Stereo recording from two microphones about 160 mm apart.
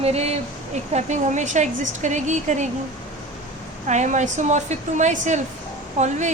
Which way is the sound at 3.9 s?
50° right (ahead or behind).